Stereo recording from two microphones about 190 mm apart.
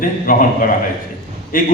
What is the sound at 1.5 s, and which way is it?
Speech, 45° left (ahead or behind).